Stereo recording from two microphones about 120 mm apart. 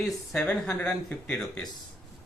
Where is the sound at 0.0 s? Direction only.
Centre (ahead or behind).